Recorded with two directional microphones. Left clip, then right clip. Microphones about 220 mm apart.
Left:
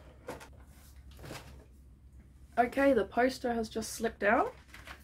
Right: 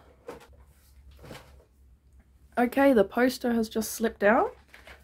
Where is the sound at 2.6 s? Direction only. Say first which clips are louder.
Right 5 dB; 50° right (ahead or behind).